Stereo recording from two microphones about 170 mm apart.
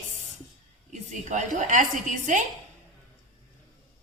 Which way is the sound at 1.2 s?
45° right (ahead or behind).